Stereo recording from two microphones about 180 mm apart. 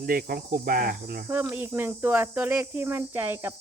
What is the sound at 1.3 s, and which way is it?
Speech, 10° right (ahead or behind).